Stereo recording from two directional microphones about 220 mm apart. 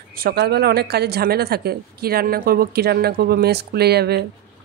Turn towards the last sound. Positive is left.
turn(degrees=-45)  # may be behind; listen again after turning